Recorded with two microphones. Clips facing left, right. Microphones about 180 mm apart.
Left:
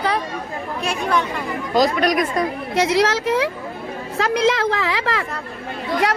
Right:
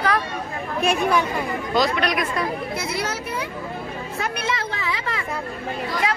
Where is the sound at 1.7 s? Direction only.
40° left (ahead or behind).